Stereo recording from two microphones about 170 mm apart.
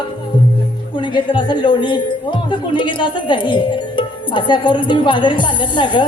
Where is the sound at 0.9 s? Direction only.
30° left (ahead or behind).